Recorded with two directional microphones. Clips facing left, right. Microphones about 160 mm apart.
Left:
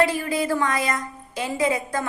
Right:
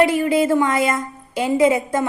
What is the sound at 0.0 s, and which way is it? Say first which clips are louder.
A woman's voice: right 6 dB; 25° right (ahead or behind).